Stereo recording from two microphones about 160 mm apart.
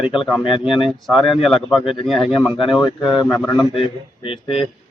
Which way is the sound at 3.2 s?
20° left (ahead or behind).